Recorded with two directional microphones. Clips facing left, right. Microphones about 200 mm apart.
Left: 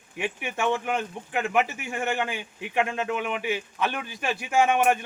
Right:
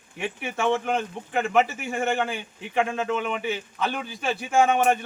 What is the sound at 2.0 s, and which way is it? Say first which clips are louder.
Speech: right 3 dB; 45° right (ahead or behind).